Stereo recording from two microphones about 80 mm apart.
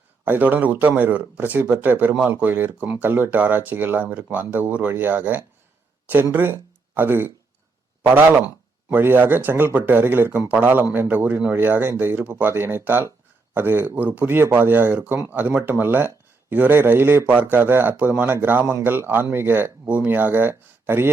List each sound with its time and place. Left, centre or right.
0.3 s speech: right